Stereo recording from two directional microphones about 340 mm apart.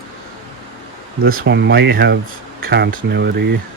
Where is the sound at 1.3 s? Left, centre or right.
Right.